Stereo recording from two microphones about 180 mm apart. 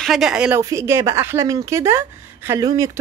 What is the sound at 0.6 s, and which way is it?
A woman's voice, 15° right (ahead or behind).